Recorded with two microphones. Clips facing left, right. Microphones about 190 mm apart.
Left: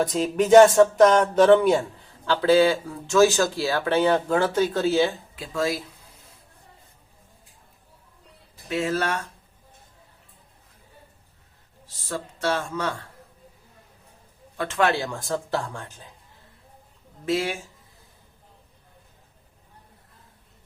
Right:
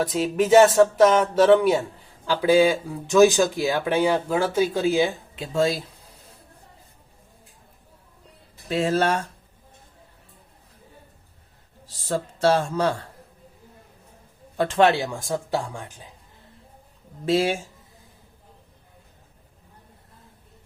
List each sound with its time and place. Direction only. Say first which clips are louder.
0.0 s speech: even; 5° right (ahead or behind); by 5.8 s 30° right (ahead or behind)
8.7 s speech: right 4 dB; 30° right (ahead or behind)
12.0 s speech: right 6 dB; 35° right (ahead or behind)
14.6 s speech: right 4 dB; 30° right (ahead or behind); by 16.0 s 15° right (ahead or behind)
17.2 s speech: right 4 dB; 30° right (ahead or behind)